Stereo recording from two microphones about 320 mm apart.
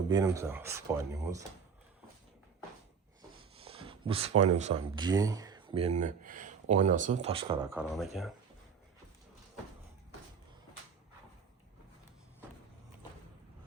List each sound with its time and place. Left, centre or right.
0.1 s speech: centre
3.2 s rub: centre
4.5 s speech: centre
7.8 s speech: centre